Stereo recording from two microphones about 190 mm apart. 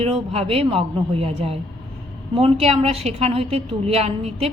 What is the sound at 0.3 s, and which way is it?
A woman's voice, 30° right (ahead or behind).